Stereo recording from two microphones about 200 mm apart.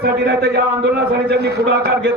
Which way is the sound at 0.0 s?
55° right (ahead or behind).